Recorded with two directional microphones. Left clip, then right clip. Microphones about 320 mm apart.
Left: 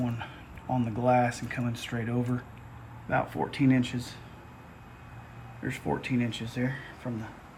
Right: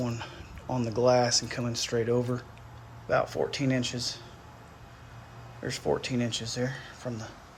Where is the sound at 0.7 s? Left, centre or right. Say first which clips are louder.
Right 2 dB; centre.